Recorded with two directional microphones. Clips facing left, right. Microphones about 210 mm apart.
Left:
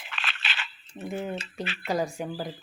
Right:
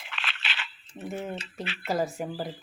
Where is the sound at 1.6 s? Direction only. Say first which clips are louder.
Left 2 dB; 45° left (ahead or behind).